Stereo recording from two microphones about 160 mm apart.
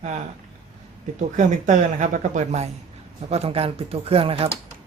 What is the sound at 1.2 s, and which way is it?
Speech, 50° right (ahead or behind).